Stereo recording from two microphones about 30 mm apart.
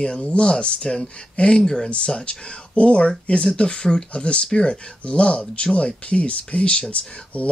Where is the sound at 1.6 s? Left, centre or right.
Centre.